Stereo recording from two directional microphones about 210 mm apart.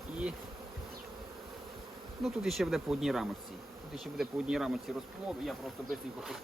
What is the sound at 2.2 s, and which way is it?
Speech, centre (ahead or behind).